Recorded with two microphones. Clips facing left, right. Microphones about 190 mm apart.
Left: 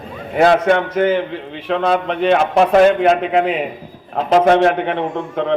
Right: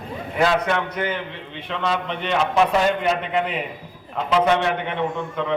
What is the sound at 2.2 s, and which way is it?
Speech, 45° left (ahead or behind).